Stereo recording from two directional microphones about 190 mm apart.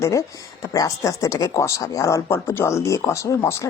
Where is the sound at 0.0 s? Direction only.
15° left (ahead or behind).